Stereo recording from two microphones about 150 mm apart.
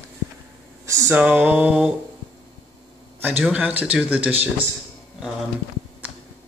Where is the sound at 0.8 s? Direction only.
20° right (ahead or behind).